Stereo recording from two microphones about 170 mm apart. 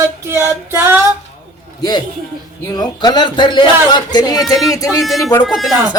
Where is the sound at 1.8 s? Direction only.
25° left (ahead or behind).